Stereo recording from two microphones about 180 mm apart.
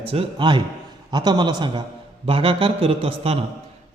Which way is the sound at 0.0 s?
30° right (ahead or behind).